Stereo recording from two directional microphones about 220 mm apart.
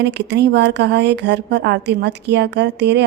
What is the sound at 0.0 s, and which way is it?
Speech, 50° right (ahead or behind).